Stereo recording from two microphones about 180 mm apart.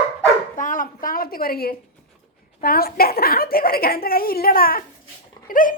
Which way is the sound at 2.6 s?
55° left (ahead or behind).